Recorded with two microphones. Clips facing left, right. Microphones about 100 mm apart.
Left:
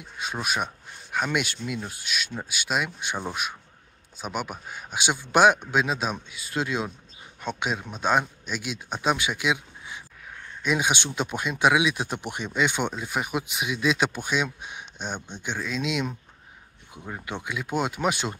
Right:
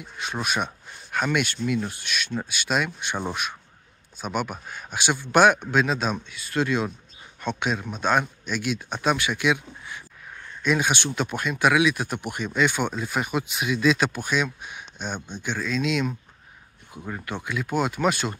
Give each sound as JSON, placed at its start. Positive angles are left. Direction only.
{"t": 0.2, "sound": "speech", "side_deg": 10}
{"t": 4.2, "sound": "speech", "side_deg": 15}